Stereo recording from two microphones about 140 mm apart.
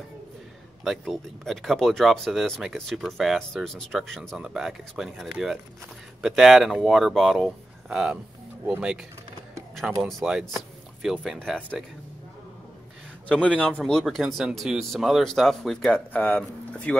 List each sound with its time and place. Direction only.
0.8 s speech: centre (ahead or behind)
13.6 s speech: 5° left (ahead or behind)